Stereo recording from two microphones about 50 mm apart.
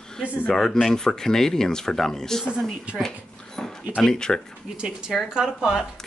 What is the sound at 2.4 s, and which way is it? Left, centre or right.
Speech, centre.